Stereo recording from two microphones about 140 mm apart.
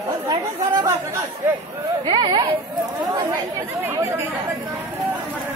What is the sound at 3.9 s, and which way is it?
Speech, 20° right (ahead or behind).